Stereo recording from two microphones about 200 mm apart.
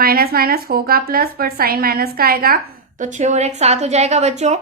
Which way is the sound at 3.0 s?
40° right (ahead or behind).